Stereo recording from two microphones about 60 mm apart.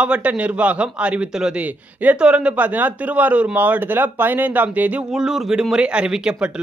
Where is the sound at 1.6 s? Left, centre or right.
Right.